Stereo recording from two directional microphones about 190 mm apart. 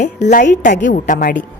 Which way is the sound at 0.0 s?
40° left (ahead or behind).